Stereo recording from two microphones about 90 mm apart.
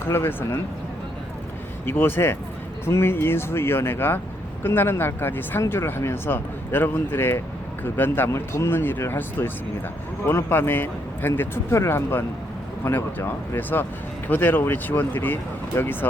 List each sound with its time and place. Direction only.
0.0 s speech: 25° left (ahead or behind)
1.8 s speech: 25° left (ahead or behind)